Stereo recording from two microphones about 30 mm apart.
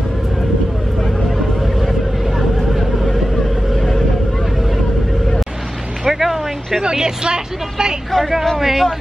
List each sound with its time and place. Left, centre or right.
6.0 s vehicle: centre
6.8 s vehicle: right
8.1 s a sound: centre
8.5 s speech: centre